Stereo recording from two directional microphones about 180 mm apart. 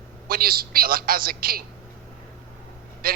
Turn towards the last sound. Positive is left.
turn(degrees=-55)  # may be behind; listen again after turning